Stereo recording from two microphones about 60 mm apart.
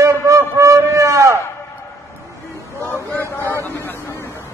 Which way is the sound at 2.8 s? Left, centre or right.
Left.